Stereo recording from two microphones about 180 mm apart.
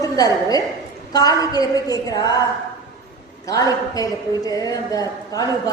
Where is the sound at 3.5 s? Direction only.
20° left (ahead or behind).